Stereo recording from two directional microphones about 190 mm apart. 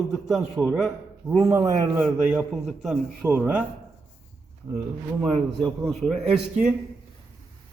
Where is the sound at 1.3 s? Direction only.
15° right (ahead or behind).